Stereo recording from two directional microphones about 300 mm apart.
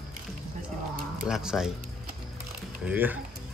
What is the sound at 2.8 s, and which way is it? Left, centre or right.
Speech, centre.